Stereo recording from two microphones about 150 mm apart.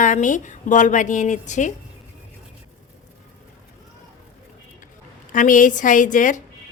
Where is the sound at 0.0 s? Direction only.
55° left (ahead or behind).